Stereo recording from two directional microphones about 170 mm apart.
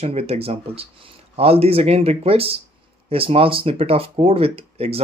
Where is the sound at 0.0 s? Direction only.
35° right (ahead or behind).